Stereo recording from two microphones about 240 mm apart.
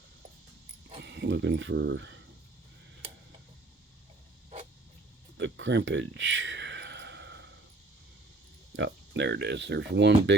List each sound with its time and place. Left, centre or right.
1.0 s speech: right
5.4 s a sound: right
8.7 s speech: right